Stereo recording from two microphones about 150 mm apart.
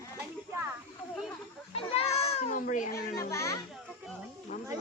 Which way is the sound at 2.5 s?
60° left (ahead or behind).